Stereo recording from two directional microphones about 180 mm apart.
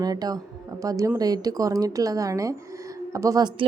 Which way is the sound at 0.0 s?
20° right (ahead or behind).